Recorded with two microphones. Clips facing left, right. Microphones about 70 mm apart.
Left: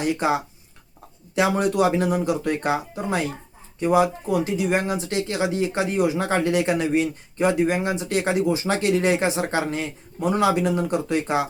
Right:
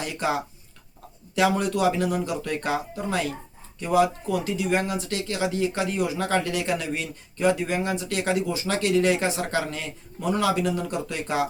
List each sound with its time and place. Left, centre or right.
0.0 s speech: left
1.4 s speech: left